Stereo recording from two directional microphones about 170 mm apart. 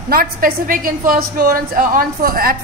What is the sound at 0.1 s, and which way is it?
A woman's voice, 55° right (ahead or behind).